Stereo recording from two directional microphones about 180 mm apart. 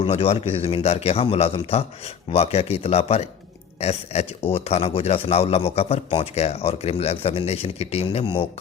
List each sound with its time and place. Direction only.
0.0 s a man's voice: 35° left (ahead or behind)